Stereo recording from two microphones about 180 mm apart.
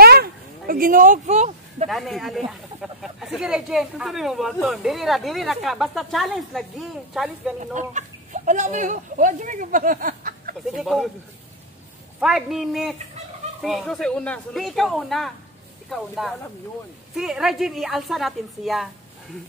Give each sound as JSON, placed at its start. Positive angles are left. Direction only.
{"t": 0.0, "sound": "a sound", "side_deg": -60}
{"t": 1.9, "sound": "speech", "side_deg": 0}
{"t": 7.7, "sound": "speech", "side_deg": -45}
{"t": 10.8, "sound": "speech", "side_deg": 0}
{"t": 12.2, "sound": "speech", "side_deg": 0}